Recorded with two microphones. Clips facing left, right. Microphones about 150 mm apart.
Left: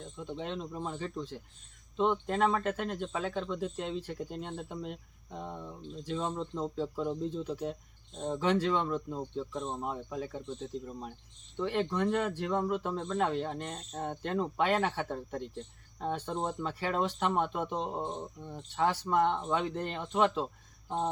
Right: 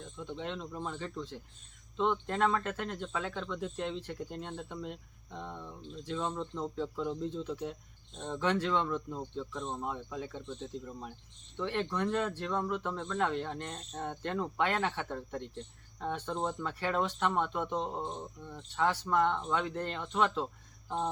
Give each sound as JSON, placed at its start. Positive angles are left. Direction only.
{"t": 0.3, "sound": "speech", "side_deg": 15}
{"t": 11.5, "sound": "speech", "side_deg": 15}